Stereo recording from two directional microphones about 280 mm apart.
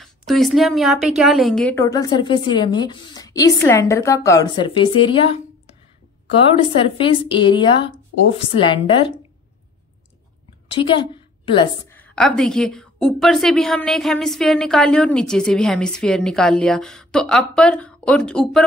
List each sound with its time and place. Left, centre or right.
0.0 s a woman's voice: centre
6.5 s a woman's voice: centre
10.7 s a woman's voice: centre